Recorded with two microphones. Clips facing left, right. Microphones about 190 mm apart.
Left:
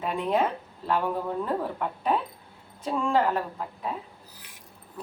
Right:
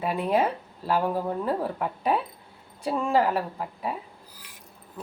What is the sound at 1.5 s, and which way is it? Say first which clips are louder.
Speech: right 2 dB; 5° right (ahead or behind).